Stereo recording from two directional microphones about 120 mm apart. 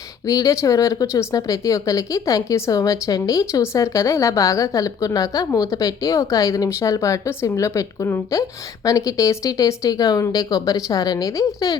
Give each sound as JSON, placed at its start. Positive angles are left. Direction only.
{"t": 0.3, "sound": "speech", "side_deg": 25}